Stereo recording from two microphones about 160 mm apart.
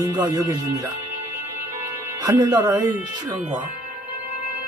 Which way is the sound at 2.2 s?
20° right (ahead or behind).